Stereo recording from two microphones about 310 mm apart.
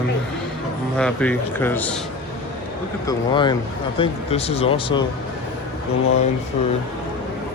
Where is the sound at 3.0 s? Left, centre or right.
Centre.